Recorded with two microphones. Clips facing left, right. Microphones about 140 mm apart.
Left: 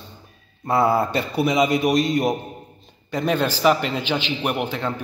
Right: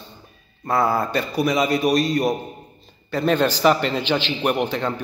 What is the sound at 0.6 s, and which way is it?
A man's voice, 25° left (ahead or behind).